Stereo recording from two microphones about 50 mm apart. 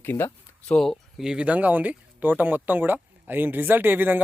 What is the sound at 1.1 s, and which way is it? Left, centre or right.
Speech, centre.